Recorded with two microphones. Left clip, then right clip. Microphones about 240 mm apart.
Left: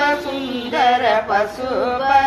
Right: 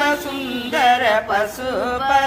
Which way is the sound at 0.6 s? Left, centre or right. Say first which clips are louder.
Even; right.